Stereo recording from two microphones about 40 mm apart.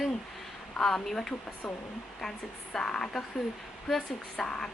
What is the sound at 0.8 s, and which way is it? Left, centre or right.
Speech, centre.